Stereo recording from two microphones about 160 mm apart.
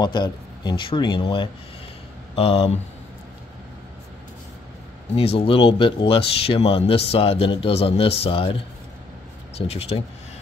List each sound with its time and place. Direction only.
0.0 s speech: 25° left (ahead or behind)
5.1 s speech: 35° left (ahead or behind)
9.6 s speech: 40° left (ahead or behind)